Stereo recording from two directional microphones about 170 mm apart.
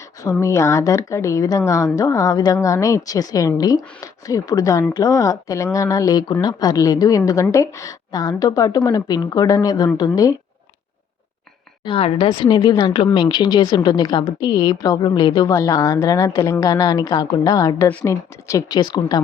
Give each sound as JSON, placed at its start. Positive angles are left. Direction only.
{"t": 0.2, "sound": "speech", "side_deg": 20}
{"t": 11.9, "sound": "speech", "side_deg": 35}